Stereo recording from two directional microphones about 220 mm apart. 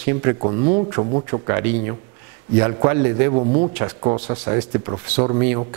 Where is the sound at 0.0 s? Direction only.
15° right (ahead or behind).